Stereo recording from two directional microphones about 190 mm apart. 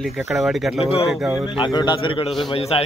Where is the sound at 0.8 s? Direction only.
30° left (ahead or behind).